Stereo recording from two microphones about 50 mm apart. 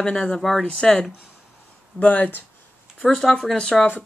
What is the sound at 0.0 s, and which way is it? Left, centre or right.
Speech, centre.